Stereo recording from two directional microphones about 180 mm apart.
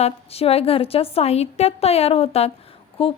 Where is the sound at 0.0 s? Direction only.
35° left (ahead or behind).